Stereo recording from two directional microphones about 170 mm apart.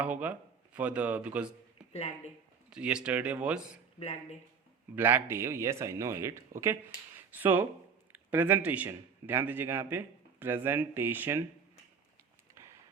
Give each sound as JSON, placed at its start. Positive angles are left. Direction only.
{"t": 0.0, "sound": "speech", "side_deg": -10}
{"t": 1.9, "sound": "speech", "side_deg": 35}
{"t": 2.6, "sound": "a man's voice", "side_deg": -5}
{"t": 4.0, "sound": "speech", "side_deg": 40}
{"t": 4.9, "sound": "a man's voice", "side_deg": -10}